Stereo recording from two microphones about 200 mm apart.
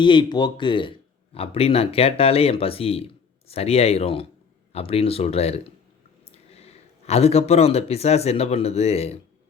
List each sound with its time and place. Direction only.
0.0 s speech: 25° left (ahead or behind)